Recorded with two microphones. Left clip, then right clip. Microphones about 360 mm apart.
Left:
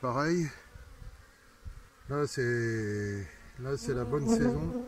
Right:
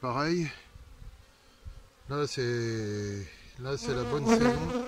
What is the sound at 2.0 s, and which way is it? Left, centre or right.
Speech, centre.